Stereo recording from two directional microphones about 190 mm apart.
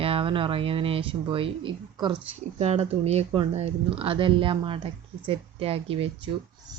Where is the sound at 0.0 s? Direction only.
30° right (ahead or behind).